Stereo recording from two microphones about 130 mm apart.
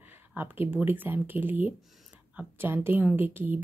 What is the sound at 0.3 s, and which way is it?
A woman's voice, 15° right (ahead or behind).